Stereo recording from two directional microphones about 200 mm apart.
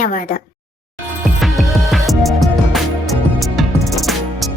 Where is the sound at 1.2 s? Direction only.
Centre (ahead or behind).